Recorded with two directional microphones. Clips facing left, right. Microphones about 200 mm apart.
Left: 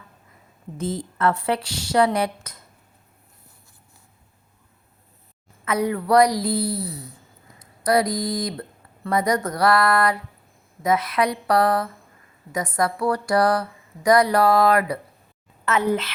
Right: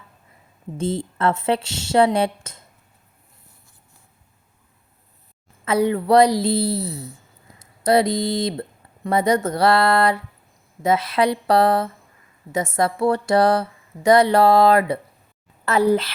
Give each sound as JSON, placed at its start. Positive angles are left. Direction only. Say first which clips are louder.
{"t": 0.8, "sound": "speech", "louder": "right 2 dB", "side_deg": -25}
{"t": 5.6, "sound": "a woman's voice", "louder": "right 4 dB", "side_deg": -30}